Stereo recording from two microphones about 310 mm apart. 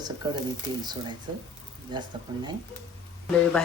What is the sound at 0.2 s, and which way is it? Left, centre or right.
Speech, centre.